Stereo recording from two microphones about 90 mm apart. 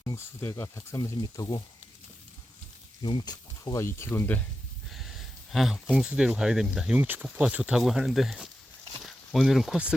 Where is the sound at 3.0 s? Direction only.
55° left (ahead or behind).